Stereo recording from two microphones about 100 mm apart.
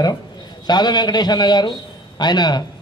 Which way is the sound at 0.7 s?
45° left (ahead or behind).